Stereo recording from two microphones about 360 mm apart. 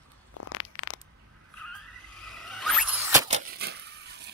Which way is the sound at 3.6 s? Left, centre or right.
Right.